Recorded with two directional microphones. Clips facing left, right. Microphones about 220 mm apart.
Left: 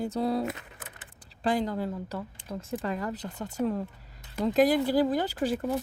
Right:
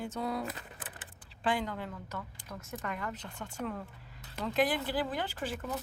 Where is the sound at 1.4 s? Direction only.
35° left (ahead or behind).